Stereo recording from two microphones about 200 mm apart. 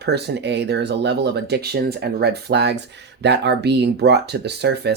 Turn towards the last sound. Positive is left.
turn(degrees=-55)  # may be behind; listen again after turning